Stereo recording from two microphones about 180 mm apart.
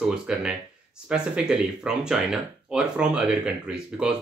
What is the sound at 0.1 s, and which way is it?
Speech, 5° right (ahead or behind).